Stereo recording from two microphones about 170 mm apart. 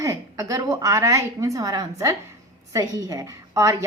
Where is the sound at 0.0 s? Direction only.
20° right (ahead or behind).